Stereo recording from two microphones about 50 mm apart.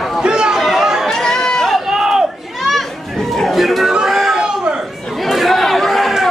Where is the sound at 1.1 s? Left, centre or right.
Centre.